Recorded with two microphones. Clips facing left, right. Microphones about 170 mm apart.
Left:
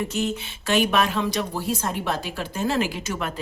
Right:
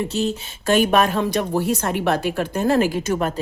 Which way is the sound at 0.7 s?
45° right (ahead or behind).